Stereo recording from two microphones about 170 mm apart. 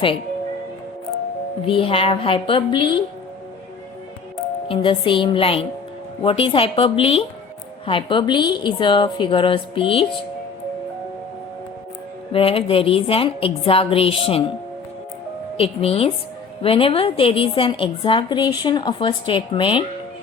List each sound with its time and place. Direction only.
1.6 s a woman's voice: 30° left (ahead or behind)
4.7 s a woman's voice: 30° left (ahead or behind)
12.3 s a woman's voice: 35° left (ahead or behind)
15.5 s a woman's voice: 35° left (ahead or behind)